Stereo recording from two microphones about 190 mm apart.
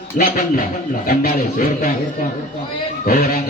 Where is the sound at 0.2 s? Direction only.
50° left (ahead or behind).